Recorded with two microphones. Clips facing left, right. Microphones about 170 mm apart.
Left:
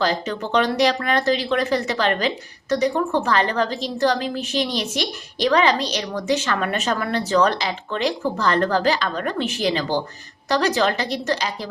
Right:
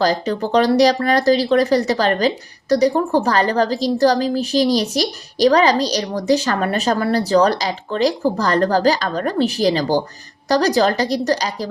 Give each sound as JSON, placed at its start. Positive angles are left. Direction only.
{"t": 0.0, "sound": "speech", "side_deg": -35}